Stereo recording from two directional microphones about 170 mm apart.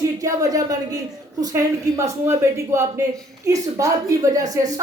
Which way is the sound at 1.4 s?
15° right (ahead or behind).